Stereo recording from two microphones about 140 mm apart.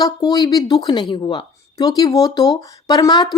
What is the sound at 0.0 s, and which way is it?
Speech, 30° left (ahead or behind).